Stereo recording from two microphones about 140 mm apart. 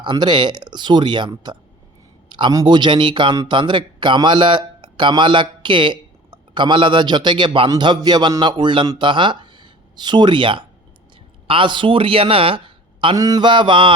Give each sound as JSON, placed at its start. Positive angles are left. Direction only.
{"t": 0.0, "sound": "a man's voice", "side_deg": -35}